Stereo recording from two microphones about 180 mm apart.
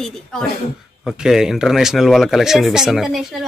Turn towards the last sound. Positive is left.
turn(degrees=0)  # may be behind; listen again after turning